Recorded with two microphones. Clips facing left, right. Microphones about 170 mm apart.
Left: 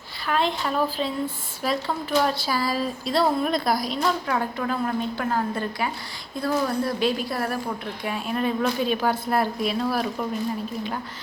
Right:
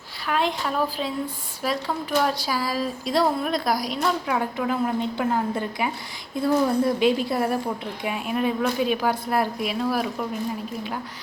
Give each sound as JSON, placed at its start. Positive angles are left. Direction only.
{"t": 0.3, "sound": "a woman's voice", "side_deg": -10}